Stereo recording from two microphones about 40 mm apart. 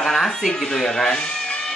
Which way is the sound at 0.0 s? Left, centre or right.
Centre.